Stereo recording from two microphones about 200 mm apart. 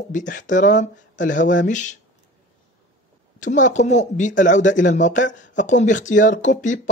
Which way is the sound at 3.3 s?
40° left (ahead or behind).